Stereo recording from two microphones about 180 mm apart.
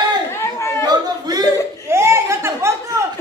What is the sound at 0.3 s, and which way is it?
Chatter, 15° left (ahead or behind).